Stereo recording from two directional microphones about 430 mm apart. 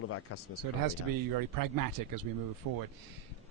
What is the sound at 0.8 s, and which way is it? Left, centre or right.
Speech, right.